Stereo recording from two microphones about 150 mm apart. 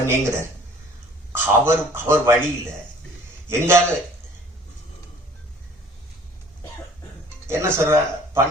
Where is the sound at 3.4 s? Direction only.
15° right (ahead or behind).